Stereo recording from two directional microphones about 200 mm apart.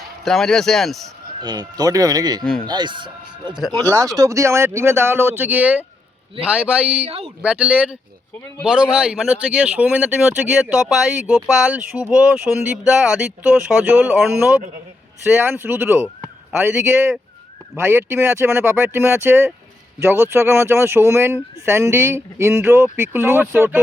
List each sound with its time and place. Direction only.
0.3 s speech: centre (ahead or behind)
1.4 s speech: 20° right (ahead or behind)
7.0 s speech: 30° right (ahead or behind)
7.4 s speech: 5° right (ahead or behind)
17.7 s speech: 10° right (ahead or behind)